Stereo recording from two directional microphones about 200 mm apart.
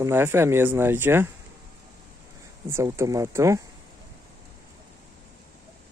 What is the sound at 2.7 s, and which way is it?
Speech, 15° right (ahead or behind).